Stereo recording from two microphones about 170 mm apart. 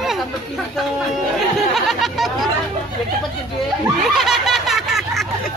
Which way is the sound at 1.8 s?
Centre (ahead or behind).